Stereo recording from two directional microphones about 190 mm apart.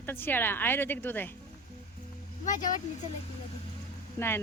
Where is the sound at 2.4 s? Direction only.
40° left (ahead or behind).